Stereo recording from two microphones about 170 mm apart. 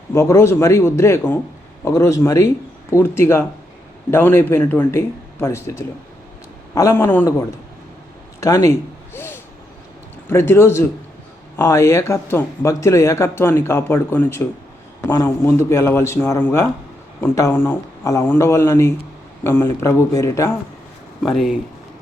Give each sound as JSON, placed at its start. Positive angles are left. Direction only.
{"t": 0.1, "sound": "speech", "side_deg": 15}
{"t": 9.1, "sound": "a sound", "side_deg": 15}
{"t": 10.2, "sound": "speech", "side_deg": 15}
{"t": 21.2, "sound": "speech", "side_deg": 0}